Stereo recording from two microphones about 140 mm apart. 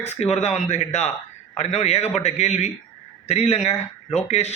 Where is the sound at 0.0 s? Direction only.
50° left (ahead or behind).